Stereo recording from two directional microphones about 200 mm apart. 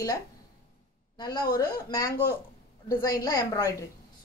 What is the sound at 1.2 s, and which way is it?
A woman's voice, 20° left (ahead or behind).